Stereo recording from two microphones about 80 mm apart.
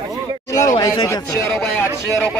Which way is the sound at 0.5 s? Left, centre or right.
Left.